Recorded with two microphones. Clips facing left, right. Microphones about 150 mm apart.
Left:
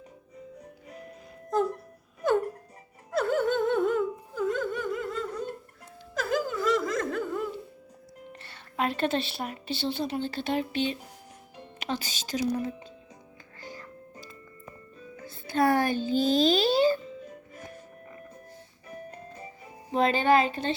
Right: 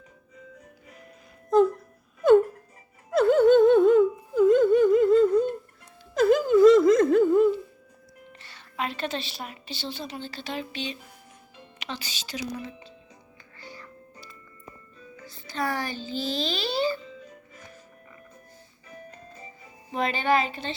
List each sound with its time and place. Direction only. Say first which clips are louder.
3.1 s a sound: right 8 dB; 20° right (ahead or behind)
6.1 s laughter: right 11 dB; 20° right (ahead or behind)
8.3 s speech: left 3 dB; 55° left (ahead or behind)
13.6 s music: left 2 dB; 45° left (ahead or behind)
19.9 s a woman's voice: left 2 dB; 40° left (ahead or behind)